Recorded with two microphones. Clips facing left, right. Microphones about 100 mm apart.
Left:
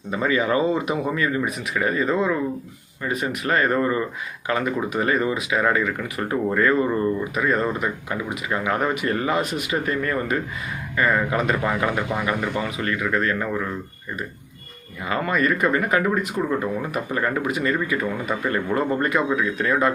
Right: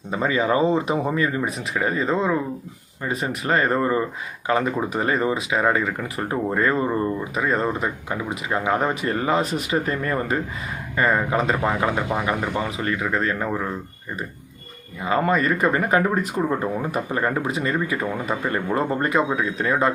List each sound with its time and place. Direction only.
0.1 s speech: 25° right (ahead or behind)
15.2 s speech: 30° right (ahead or behind)